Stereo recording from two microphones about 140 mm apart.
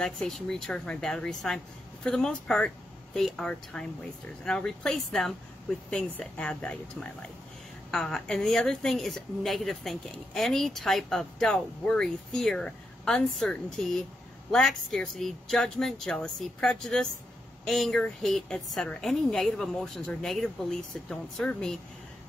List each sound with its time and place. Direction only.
0.0 s a woman's voice: 5° left (ahead or behind)